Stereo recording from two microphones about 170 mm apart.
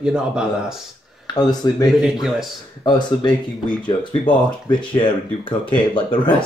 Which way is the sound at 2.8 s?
25° left (ahead or behind).